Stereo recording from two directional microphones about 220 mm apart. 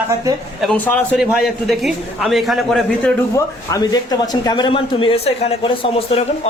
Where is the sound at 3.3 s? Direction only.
15° left (ahead or behind).